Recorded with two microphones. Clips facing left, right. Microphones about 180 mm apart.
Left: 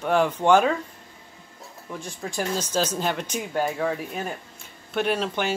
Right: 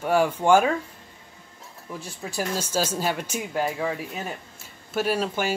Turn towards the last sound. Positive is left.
turn(degrees=-5)  # may be behind; listen again after turning